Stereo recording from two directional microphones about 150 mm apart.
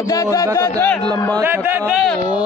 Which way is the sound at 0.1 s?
25° left (ahead or behind).